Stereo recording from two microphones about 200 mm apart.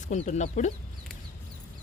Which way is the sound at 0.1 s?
35° left (ahead or behind).